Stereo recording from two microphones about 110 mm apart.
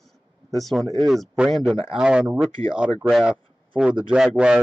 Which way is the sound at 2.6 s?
50° right (ahead or behind).